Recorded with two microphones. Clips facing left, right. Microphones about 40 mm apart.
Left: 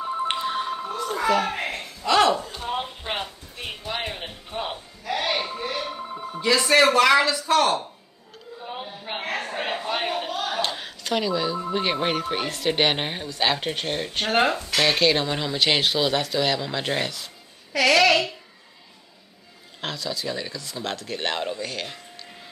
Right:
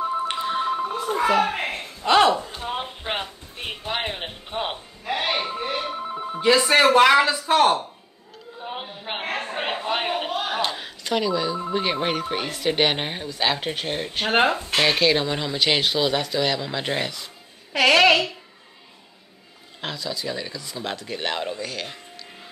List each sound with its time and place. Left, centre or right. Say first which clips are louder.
0.4 s telephone: right 3 dB; centre
1.1 s a sound: right 2 dB; right
2.3 s a sound: even; centre
3.8 s music: right 3 dB; right
6.6 s speech: right 1 dB; centre
9.2 s a sound: right 1 dB; right
10.6 s music: right 1 dB; centre
11.7 s speech: even; centre
17.7 s speech: right 2 dB; right
19.8 s speech: even; centre